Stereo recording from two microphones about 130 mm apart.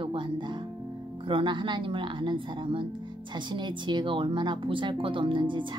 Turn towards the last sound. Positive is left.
turn(degrees=-40)  # may be behind; listen again after turning